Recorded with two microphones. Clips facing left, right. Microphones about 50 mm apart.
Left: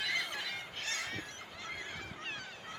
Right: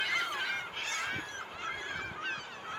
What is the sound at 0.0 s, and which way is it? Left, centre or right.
Goose, right.